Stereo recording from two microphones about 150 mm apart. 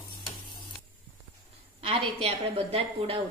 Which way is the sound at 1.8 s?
40° right (ahead or behind).